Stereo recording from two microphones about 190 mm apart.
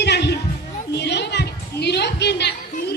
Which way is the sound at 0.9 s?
65° left (ahead or behind).